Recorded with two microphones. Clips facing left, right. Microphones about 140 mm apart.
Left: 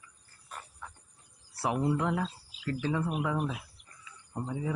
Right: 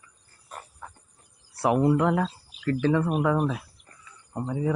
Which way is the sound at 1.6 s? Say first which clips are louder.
Right 8 dB; 60° right (ahead or behind).